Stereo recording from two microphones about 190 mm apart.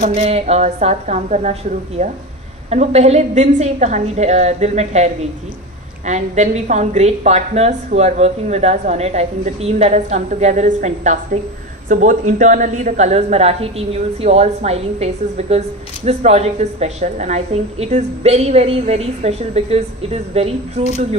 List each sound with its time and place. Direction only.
0.0 s a woman's voice: 35° right (ahead or behind)